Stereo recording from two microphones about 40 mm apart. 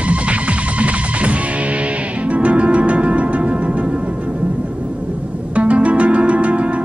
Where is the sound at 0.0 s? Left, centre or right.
Right.